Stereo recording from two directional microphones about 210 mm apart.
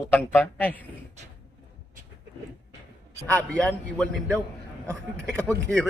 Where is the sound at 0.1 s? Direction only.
10° left (ahead or behind).